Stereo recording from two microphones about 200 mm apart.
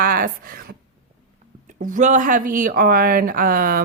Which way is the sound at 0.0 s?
45° right (ahead or behind).